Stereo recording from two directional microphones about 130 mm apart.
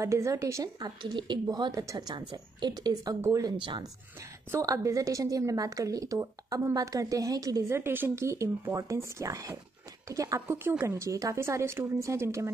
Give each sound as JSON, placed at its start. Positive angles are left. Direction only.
{"t": 0.0, "sound": "a woman's voice", "side_deg": -25}
{"t": 3.5, "sound": "a woman's voice", "side_deg": -35}
{"t": 4.5, "sound": "a woman's voice", "side_deg": -25}